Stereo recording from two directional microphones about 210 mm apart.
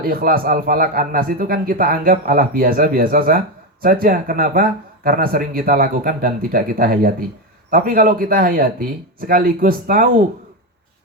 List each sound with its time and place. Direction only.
0.0 s a man's voice: 45° right (ahead or behind)